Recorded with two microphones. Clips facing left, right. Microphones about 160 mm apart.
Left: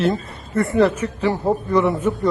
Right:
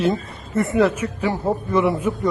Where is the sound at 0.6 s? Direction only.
Centre (ahead or behind); by 2.0 s 20° right (ahead or behind).